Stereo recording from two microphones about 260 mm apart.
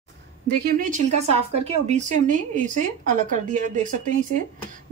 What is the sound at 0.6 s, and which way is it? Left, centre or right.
A woman's voice, right.